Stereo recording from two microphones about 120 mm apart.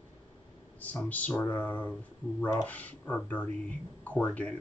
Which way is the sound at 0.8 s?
15° left (ahead or behind).